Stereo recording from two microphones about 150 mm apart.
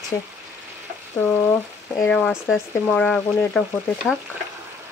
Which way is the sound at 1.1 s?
10° left (ahead or behind).